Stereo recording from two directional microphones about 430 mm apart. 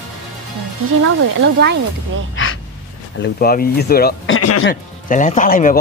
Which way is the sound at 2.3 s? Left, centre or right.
Left.